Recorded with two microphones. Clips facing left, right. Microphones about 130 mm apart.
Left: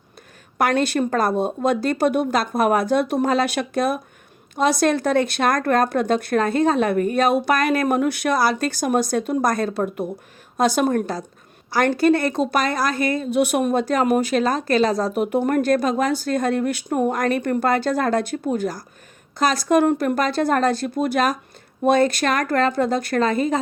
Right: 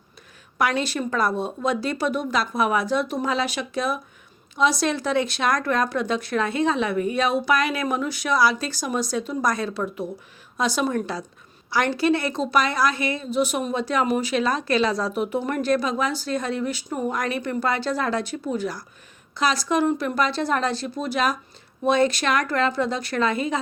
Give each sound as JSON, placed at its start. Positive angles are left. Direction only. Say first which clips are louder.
{"t": 0.6, "sound": "a woman's voice", "louder": "left 4 dB", "side_deg": 55}